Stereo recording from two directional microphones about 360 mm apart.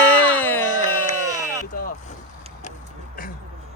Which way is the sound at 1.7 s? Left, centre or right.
Left.